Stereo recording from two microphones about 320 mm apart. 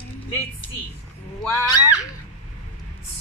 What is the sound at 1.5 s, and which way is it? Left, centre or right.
Speech, centre.